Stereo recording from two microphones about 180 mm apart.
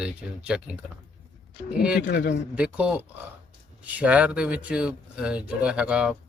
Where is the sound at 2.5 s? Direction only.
5° right (ahead or behind).